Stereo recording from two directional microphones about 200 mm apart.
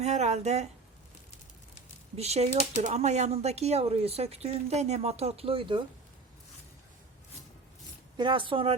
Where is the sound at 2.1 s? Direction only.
30° right (ahead or behind).